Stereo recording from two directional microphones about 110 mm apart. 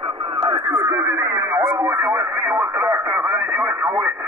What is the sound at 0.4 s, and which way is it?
Radio, 40° right (ahead or behind).